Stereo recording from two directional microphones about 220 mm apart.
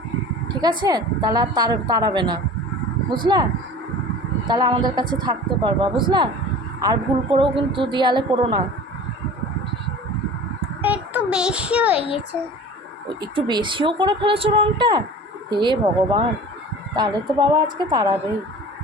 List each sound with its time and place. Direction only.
0.4 s a woman's voice: 20° right (ahead or behind)
4.4 s a woman's voice: 20° right (ahead or behind)
10.8 s a sound: 5° right (ahead or behind)
13.3 s a woman's voice: 20° right (ahead or behind)